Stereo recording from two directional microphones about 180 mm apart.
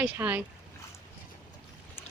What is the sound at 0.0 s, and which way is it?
Speech, 10° right (ahead or behind).